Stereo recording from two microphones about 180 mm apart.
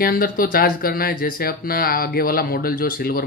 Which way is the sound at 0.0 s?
55° left (ahead or behind).